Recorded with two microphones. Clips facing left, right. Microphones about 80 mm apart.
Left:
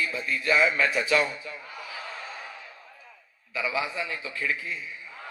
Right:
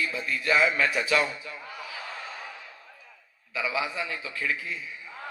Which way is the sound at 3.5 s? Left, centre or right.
Left.